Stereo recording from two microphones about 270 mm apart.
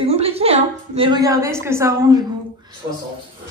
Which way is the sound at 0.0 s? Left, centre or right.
Right.